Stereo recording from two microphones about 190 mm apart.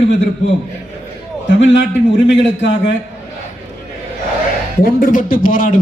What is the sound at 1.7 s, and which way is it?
A man's voice, 70° left (ahead or behind).